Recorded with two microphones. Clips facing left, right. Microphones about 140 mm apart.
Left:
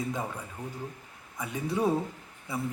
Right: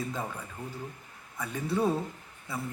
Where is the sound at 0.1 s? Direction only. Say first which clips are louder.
Left 2 dB; 15° left (ahead or behind).